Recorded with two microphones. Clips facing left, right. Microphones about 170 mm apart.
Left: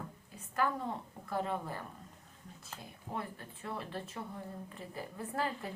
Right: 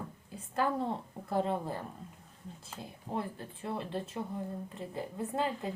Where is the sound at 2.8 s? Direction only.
25° right (ahead or behind).